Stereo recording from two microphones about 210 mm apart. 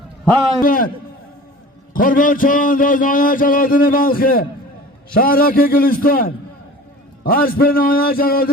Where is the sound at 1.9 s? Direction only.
40° left (ahead or behind).